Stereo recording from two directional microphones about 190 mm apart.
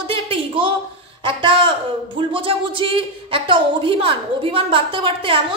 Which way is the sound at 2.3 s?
25° right (ahead or behind).